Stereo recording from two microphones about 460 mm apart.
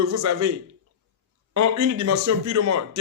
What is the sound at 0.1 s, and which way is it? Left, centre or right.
Speech, right.